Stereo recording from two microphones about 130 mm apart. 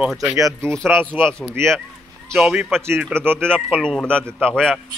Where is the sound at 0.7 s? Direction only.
5° left (ahead or behind).